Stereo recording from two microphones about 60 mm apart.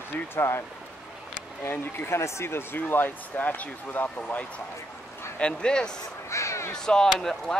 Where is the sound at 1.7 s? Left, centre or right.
Left.